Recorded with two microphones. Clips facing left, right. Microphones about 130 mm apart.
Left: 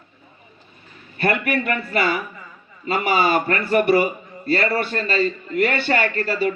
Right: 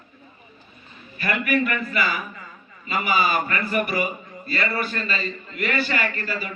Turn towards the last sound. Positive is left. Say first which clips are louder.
# left 8 dB
turn(degrees=30)  # may be behind; listen again after turning